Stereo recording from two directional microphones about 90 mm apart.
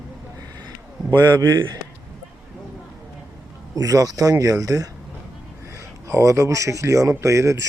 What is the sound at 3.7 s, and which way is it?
Speech, 40° right (ahead or behind).